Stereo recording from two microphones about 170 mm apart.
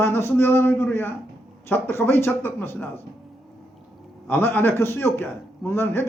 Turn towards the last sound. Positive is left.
turn(degrees=15)  # may be behind; listen again after turning